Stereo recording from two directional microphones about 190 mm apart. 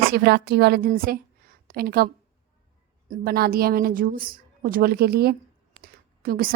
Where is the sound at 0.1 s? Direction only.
60° right (ahead or behind).